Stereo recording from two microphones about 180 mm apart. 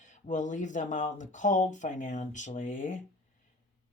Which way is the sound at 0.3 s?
45° left (ahead or behind).